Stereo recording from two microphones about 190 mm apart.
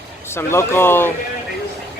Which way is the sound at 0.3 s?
15° left (ahead or behind).